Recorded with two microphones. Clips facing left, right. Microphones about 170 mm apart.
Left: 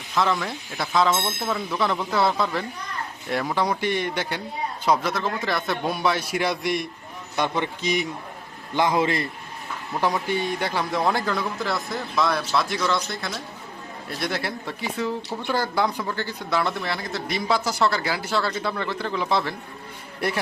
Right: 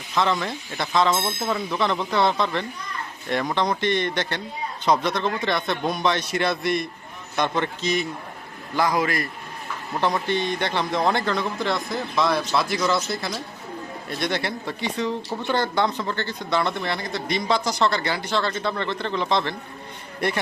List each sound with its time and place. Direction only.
0.1 s a man's voice: centre (ahead or behind); by 9.2 s 25° left (ahead or behind)
10.0 s a man's voice: 10° left (ahead or behind)